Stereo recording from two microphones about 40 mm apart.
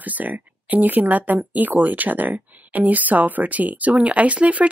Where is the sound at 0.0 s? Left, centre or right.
Right.